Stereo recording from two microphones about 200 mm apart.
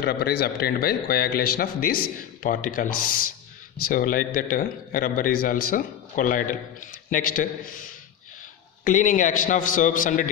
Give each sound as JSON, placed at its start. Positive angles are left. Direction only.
{"t": 0.0, "sound": "a man's voice", "side_deg": 55}